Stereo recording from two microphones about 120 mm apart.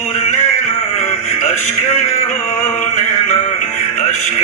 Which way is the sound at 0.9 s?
75° left (ahead or behind).